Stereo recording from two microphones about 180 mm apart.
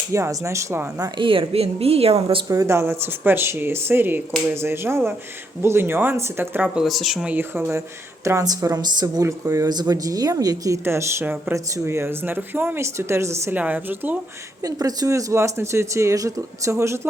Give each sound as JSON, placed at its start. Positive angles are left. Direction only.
{"t": 0.1, "sound": "a woman's voice", "side_deg": -15}
{"t": 2.2, "sound": "speech", "side_deg": -20}
{"t": 14.6, "sound": "speech", "side_deg": -20}